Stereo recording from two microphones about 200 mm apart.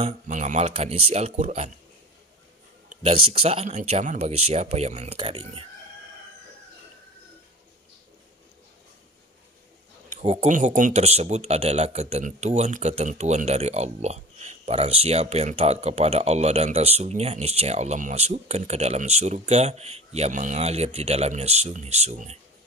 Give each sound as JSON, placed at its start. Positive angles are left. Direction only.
{"t": 0.0, "sound": "speech", "side_deg": -40}
{"t": 2.9, "sound": "a sound", "side_deg": -35}
{"t": 3.3, "sound": "speech", "side_deg": -30}
{"t": 10.0, "sound": "speech", "side_deg": -35}